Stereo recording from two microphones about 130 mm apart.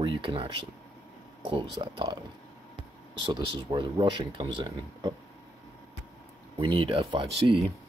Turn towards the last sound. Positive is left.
turn(degrees=-40)  # may be behind; listen again after turning